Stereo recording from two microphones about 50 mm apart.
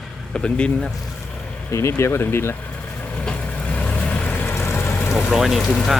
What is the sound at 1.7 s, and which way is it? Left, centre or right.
Speech, left.